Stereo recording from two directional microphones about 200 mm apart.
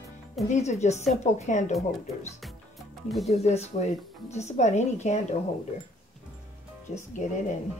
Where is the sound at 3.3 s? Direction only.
35° left (ahead or behind).